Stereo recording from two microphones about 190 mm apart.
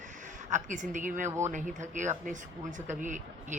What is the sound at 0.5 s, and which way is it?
Speech, 40° right (ahead or behind).